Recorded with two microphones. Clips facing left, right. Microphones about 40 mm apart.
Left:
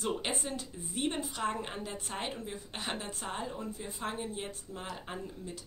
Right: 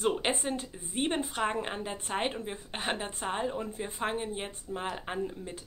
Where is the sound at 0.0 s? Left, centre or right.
Right.